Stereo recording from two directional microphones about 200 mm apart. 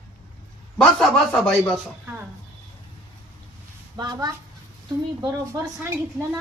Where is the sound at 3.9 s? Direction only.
20° right (ahead or behind).